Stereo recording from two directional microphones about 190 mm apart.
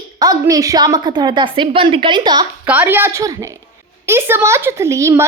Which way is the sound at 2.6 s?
10° right (ahead or behind).